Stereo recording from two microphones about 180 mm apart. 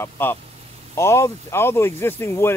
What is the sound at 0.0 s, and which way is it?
Speech, 10° left (ahead or behind).